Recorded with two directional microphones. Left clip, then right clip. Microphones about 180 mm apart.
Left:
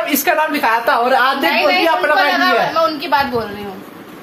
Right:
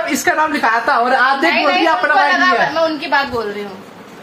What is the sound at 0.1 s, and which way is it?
A woman's voice, 15° right (ahead or behind).